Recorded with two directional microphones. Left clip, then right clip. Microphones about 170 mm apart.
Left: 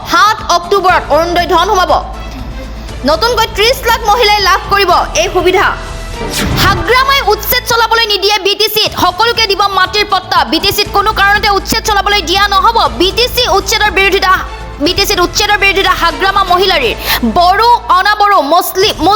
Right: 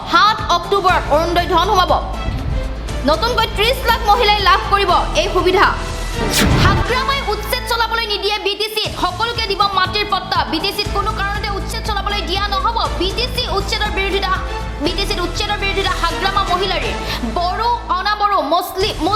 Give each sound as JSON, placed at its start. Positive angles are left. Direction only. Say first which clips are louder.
{"t": 0.1, "sound": "a woman's voice", "louder": "left 5 dB", "side_deg": 35}
{"t": 3.2, "sound": "a woman's voice", "louder": "left 6 dB", "side_deg": 35}
{"t": 5.5, "sound": "a woman's voice", "louder": "left 3 dB", "side_deg": 20}
{"t": 6.2, "sound": "speech", "louder": "even", "side_deg": 0}
{"t": 6.6, "sound": "a woman's voice", "louder": "left 7 dB", "side_deg": 50}